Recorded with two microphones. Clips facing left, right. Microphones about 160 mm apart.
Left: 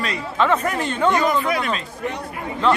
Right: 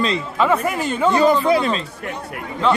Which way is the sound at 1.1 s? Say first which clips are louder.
Right 5 dB; 30° right (ahead or behind).